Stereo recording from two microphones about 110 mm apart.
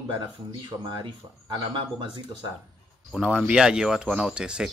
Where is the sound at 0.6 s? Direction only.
40° right (ahead or behind).